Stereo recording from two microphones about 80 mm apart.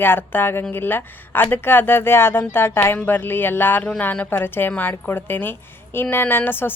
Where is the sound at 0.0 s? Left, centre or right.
Left.